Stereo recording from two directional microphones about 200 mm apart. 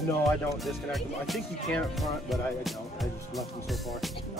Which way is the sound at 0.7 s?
Centre (ahead or behind).